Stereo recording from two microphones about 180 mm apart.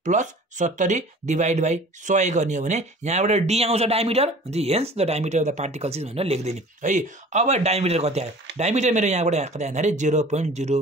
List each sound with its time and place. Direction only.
0.0 s speech: 40° right (ahead or behind)